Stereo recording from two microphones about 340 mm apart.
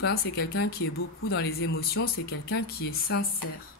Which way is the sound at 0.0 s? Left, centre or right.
Left.